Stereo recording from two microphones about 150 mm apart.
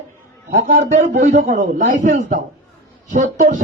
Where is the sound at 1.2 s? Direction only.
65° right (ahead or behind).